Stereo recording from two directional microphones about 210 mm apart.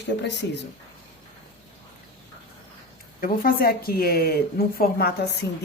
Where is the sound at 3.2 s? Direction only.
45° left (ahead or behind).